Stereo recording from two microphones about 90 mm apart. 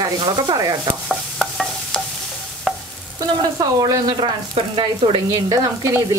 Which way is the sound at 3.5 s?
40° right (ahead or behind).